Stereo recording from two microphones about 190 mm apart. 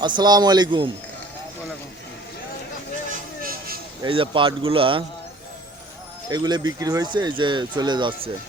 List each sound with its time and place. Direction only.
0.0 s speech: 25° right (ahead or behind)
3.1 s vehicle: 50° right (ahead or behind)
4.0 s speech: 25° right (ahead or behind)
6.2 s speech: 20° right (ahead or behind)